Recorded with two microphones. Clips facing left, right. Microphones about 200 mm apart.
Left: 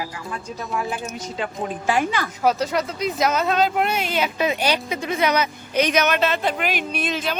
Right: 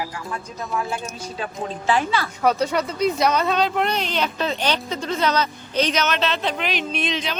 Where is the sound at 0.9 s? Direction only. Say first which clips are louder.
Left 1 dB; 20° left (ahead or behind).